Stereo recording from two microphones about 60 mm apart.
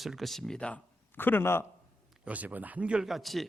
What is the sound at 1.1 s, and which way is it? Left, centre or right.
Speech, left.